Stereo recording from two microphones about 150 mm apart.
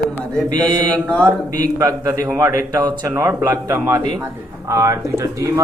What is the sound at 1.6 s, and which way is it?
A man's voice, 20° right (ahead or behind).